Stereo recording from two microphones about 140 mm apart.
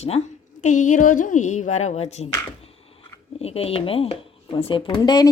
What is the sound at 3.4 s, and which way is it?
Speech, 45° left (ahead or behind).